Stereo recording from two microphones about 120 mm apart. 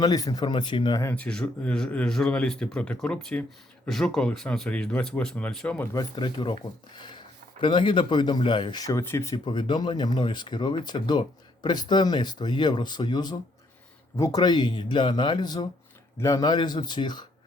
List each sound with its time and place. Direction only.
0.0 s speech: 30° left (ahead or behind)
1.1 s speech: 10° left (ahead or behind)
5.9 s speech: 35° left (ahead or behind)
8.9 s speech: 25° left (ahead or behind)
9.3 s speech: 40° left (ahead or behind)